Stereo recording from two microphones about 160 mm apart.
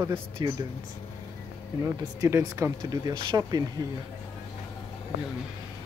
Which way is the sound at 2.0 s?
20° right (ahead or behind).